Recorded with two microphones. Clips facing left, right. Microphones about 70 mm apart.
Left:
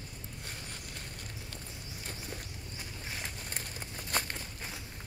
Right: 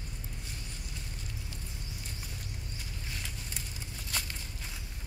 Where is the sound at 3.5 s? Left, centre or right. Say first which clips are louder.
Left 2 dB; left.